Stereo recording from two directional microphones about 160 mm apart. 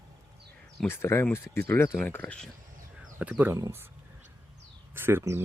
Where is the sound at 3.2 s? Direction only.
10° right (ahead or behind).